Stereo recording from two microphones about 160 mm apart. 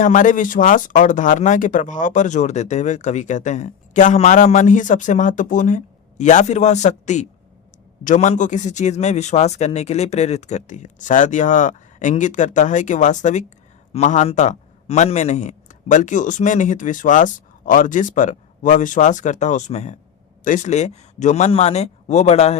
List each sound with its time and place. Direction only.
0.0 s speech: 55° left (ahead or behind)